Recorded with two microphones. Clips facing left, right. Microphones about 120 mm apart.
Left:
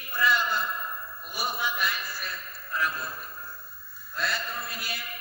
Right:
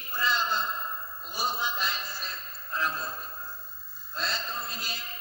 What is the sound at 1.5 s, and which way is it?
A man's voice, 20° right (ahead or behind).